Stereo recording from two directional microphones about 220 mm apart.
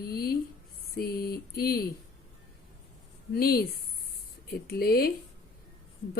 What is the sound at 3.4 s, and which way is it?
Speech, 45° left (ahead or behind).